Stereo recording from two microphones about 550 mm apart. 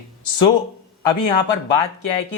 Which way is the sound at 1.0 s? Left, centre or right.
Left.